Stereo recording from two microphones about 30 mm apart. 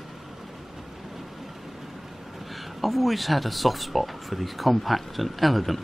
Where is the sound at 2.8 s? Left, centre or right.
Centre.